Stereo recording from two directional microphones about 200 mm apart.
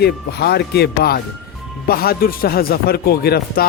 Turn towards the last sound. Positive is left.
turn(degrees=50)  # may be behind; listen again after turning